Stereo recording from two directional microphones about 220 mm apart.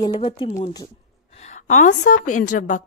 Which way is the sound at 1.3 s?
30° left (ahead or behind).